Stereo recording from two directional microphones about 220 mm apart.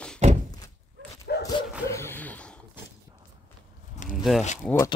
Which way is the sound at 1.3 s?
45° left (ahead or behind).